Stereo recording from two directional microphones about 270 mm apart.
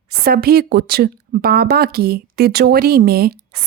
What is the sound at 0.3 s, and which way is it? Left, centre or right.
Speech, right.